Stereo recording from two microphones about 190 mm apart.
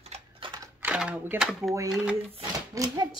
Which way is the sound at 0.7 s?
5° right (ahead or behind).